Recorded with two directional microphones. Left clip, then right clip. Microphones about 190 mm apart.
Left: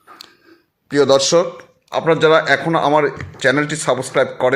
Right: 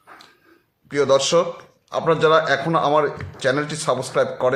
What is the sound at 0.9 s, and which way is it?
A man's voice, 30° left (ahead or behind).